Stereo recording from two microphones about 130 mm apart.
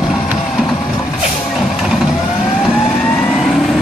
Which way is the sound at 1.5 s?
Centre (ahead or behind).